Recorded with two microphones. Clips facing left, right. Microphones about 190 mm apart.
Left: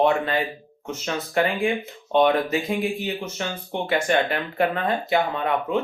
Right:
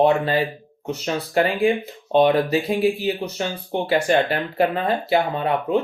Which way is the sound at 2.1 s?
35° right (ahead or behind).